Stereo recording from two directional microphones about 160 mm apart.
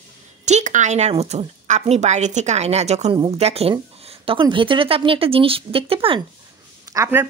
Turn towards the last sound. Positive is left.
turn(degrees=-15)  # may be behind; listen again after turning